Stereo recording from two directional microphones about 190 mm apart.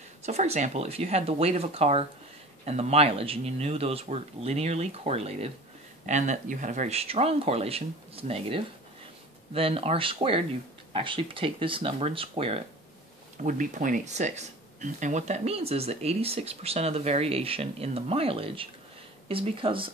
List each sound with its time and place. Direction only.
0.2 s speech: 35° right (ahead or behind)
13.4 s speech: 45° right (ahead or behind); by 19.9 s 25° right (ahead or behind)